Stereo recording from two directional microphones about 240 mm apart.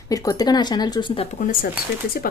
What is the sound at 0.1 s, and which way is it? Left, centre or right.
Speech, centre.